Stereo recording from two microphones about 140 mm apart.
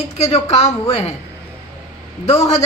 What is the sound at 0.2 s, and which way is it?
Speech, 50° left (ahead or behind).